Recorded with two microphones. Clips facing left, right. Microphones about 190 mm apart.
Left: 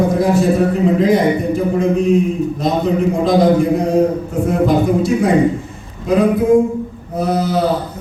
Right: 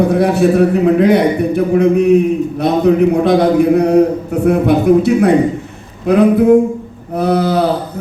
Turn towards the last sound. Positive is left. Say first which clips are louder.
# right 3 dB
turn(degrees=-65)  # may be behind; listen again after turning